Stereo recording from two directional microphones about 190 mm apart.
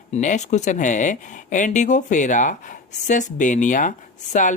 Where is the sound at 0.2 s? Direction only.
40° left (ahead or behind).